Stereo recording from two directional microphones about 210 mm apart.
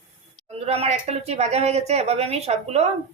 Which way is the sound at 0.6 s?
30° right (ahead or behind).